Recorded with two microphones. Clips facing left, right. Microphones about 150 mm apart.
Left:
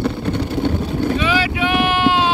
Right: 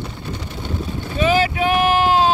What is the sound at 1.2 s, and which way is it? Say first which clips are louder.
Boat: right 2 dB; 40° right (ahead or behind).